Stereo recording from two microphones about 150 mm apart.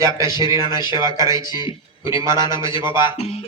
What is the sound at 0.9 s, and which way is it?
Speech, 20° right (ahead or behind).